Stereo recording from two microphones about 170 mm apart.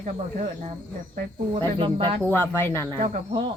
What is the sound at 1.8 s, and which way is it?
Speech, 30° right (ahead or behind).